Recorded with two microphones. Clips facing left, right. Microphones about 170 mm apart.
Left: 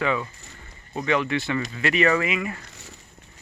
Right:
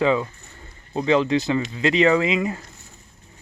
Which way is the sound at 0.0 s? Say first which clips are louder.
Right 5 dB; 25° right (ahead or behind).